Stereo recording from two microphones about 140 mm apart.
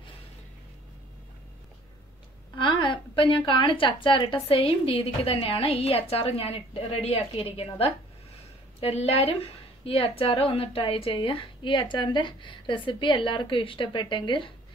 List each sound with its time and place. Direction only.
2.6 s a woman's voice: 35° left (ahead or behind)